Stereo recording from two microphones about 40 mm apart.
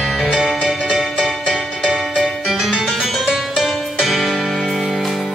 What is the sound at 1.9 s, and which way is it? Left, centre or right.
Music, centre.